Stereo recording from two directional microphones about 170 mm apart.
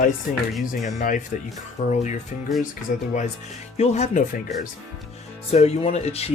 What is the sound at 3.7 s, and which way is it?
Speech, 40° left (ahead or behind).